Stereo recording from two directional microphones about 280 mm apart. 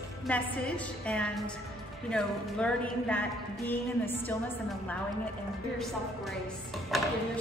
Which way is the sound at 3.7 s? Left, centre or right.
Centre.